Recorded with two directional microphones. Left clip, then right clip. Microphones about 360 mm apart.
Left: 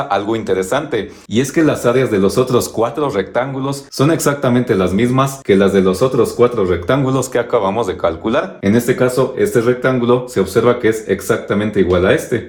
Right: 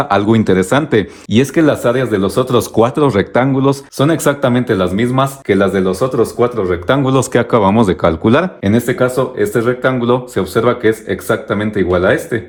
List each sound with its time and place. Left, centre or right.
0.0 s speech: right
2.8 s speech: right